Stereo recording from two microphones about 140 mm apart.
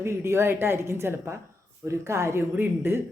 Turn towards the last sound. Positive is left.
turn(degrees=-15)  # may be behind; listen again after turning